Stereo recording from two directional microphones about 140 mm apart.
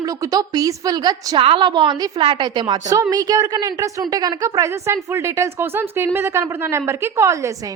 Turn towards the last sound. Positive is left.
turn(degrees=-20)  # may be behind; listen again after turning